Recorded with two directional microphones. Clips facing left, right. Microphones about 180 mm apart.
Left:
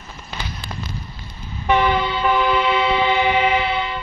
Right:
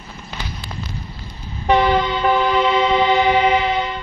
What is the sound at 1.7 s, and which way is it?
Train, 35° right (ahead or behind).